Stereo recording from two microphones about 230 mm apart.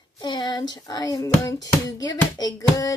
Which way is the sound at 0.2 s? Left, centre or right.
Centre.